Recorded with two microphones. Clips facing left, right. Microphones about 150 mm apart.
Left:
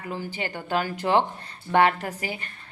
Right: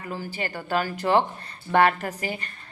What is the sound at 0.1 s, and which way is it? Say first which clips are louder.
A woman's voice: even; 15° left (ahead or behind).